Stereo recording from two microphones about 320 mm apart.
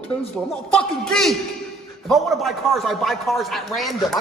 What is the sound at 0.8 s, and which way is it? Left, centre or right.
A man's voice, centre.